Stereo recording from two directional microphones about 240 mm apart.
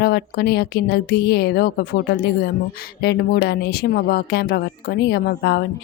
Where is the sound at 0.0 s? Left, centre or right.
Left.